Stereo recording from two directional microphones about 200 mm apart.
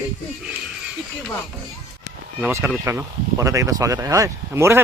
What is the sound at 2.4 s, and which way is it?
Speech, 15° right (ahead or behind).